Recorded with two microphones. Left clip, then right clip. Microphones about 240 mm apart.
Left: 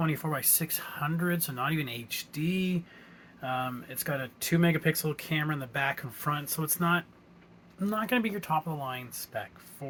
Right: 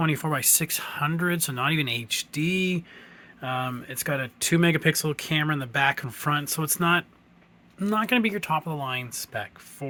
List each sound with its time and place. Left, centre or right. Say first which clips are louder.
0.0 s speech: right 6 dB; right